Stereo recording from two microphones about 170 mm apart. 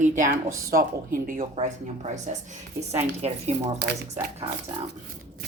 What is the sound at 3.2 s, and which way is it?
Speech, 40° right (ahead or behind).